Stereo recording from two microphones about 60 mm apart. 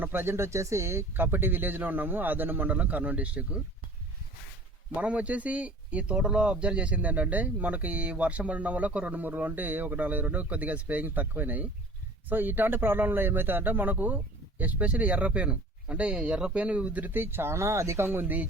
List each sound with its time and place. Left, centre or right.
0.0 s speech: right
4.9 s speech: right